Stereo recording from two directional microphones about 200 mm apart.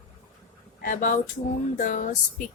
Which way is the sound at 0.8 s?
40° left (ahead or behind).